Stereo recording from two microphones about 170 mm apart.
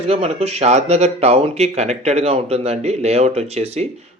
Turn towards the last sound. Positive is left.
turn(degrees=-40)  # may be behind; listen again after turning